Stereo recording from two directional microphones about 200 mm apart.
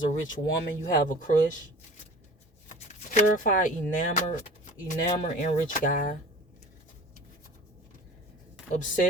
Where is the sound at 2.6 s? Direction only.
40° left (ahead or behind).